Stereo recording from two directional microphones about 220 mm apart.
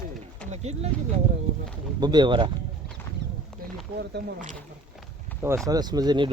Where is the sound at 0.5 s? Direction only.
30° right (ahead or behind).